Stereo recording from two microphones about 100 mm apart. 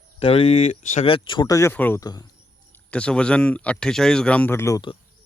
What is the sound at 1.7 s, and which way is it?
Speech, 20° left (ahead or behind).